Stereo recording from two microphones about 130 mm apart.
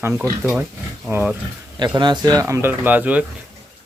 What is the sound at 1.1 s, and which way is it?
Speech, 15° right (ahead or behind).